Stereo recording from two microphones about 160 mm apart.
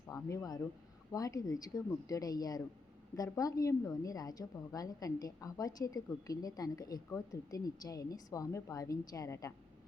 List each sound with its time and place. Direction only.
0.1 s a woman's voice: 20° left (ahead or behind)